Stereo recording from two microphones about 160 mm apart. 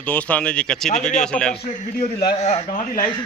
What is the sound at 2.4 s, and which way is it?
Speech, 40° left (ahead or behind).